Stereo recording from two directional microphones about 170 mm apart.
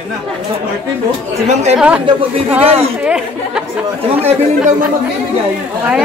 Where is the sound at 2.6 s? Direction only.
35° right (ahead or behind).